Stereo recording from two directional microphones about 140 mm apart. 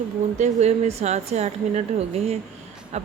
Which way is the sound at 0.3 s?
55° right (ahead or behind).